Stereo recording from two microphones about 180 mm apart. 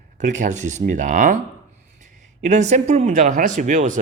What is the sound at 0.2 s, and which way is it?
Speech, 45° right (ahead or behind).